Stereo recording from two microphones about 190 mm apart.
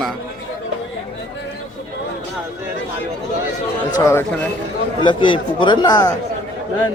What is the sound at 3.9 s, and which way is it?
A man's voice, 15° left (ahead or behind).